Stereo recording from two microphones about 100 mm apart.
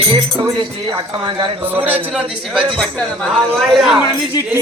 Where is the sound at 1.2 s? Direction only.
50° right (ahead or behind).